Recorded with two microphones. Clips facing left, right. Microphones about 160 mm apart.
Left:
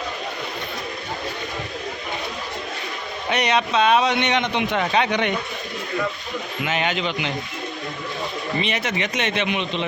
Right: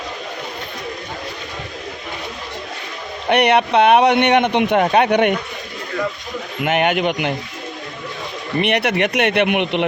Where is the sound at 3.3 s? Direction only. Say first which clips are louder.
Right 7 dB; 60° right (ahead or behind).